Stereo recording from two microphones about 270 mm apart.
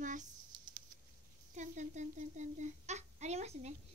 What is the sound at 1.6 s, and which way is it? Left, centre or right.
A child's voice, right.